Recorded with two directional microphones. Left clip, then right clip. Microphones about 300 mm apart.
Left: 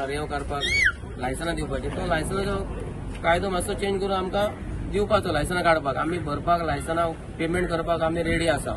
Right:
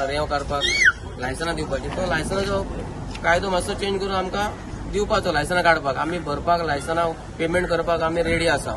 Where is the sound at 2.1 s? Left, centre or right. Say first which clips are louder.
Right 2 dB; centre.